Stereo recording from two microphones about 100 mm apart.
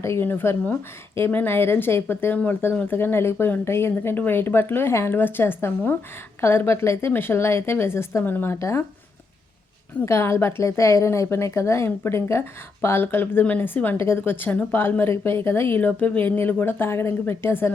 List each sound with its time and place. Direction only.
0.0 s a woman's voice: 25° left (ahead or behind)
8.5 s speech: 30° left (ahead or behind)
10.1 s a woman's voice: 25° left (ahead or behind)